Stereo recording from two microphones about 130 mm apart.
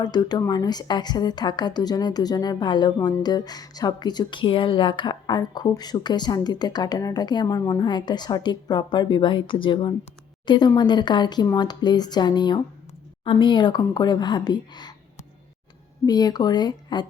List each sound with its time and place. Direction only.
0.0 s a woman's voice: 30° left (ahead or behind)
16.0 s a woman's voice: 30° left (ahead or behind)